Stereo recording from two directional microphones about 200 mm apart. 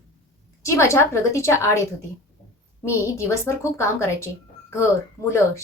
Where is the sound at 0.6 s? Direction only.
15° left (ahead or behind).